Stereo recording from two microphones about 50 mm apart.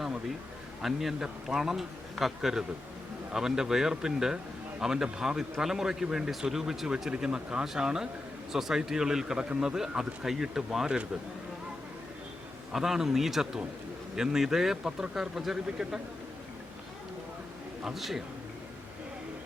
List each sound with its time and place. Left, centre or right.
0.8 s a man's voice: centre
12.7 s a man's voice: centre
17.8 s a man's voice: centre